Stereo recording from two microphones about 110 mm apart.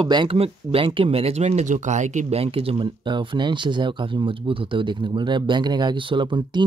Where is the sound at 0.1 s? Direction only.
45° right (ahead or behind).